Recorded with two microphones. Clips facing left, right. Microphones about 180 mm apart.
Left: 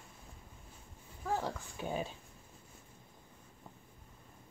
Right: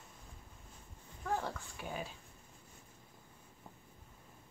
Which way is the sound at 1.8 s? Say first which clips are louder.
Left 7 dB; 25° left (ahead or behind).